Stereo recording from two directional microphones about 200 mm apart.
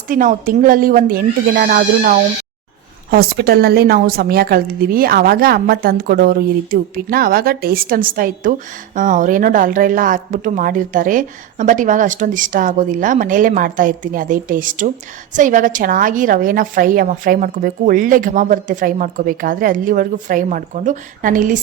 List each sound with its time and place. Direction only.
0.1 s a woman's voice: 40° right (ahead or behind)